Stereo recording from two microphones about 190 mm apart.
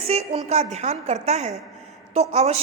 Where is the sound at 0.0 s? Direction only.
30° right (ahead or behind).